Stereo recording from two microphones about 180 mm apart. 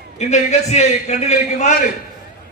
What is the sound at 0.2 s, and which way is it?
A man's voice, 40° left (ahead or behind).